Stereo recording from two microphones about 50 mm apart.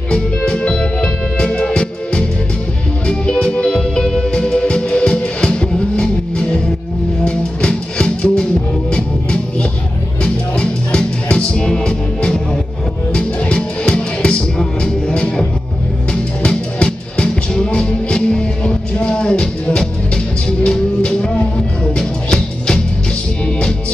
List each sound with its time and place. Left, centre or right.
0.5 s music: left